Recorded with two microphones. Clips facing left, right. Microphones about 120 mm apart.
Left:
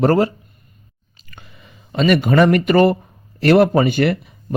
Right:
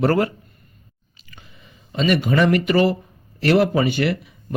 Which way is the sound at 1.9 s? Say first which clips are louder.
Left 4 dB; 60° left (ahead or behind).